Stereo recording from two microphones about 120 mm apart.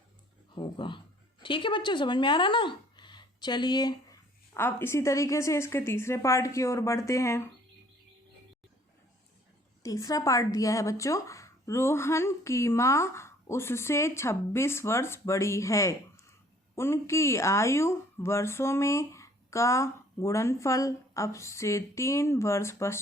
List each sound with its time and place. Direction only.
0.5 s speech: 40° left (ahead or behind)
4.5 s speech: 20° left (ahead or behind)
9.8 s speech: 25° left (ahead or behind)